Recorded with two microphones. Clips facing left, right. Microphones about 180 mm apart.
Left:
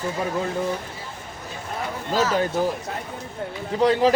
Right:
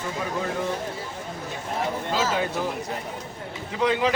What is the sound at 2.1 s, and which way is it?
Speech, 45° left (ahead or behind).